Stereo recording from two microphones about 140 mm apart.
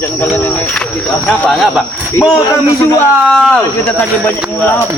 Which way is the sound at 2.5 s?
25° left (ahead or behind).